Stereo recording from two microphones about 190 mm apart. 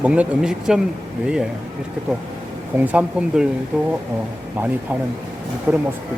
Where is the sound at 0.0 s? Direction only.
5° right (ahead or behind).